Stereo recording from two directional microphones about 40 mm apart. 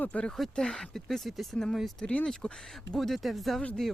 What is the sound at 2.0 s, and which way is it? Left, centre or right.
Speech, left.